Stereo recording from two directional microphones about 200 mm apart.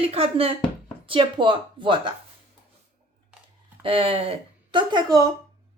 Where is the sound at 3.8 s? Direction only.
25° right (ahead or behind).